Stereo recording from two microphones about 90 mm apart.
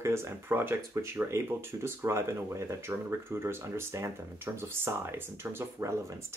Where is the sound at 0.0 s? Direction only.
30° right (ahead or behind).